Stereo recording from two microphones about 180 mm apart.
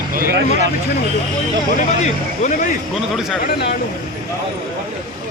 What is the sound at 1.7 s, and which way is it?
Speech, 45° left (ahead or behind).